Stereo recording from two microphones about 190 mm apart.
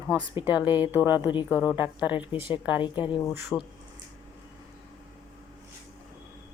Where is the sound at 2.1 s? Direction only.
25° left (ahead or behind).